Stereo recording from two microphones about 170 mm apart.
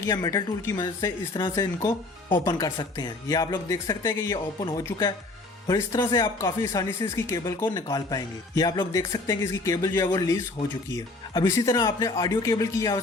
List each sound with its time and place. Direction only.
0.0 s speech: 20° left (ahead or behind)